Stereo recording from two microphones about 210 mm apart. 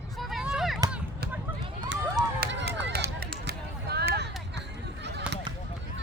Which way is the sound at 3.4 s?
50° right (ahead or behind).